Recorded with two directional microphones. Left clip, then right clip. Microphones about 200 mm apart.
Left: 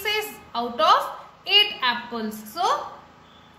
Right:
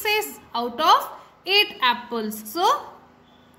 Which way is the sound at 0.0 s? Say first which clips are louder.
Right 2 dB; 45° right (ahead or behind).